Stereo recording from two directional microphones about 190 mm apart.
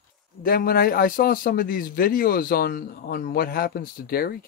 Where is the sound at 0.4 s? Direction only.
50° left (ahead or behind).